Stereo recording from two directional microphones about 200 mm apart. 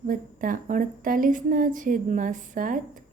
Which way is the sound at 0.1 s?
40° right (ahead or behind).